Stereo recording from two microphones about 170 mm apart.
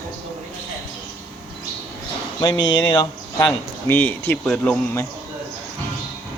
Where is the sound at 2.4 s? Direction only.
25° left (ahead or behind).